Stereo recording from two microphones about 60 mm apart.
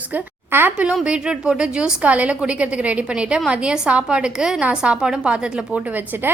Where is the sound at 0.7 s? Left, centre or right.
Right.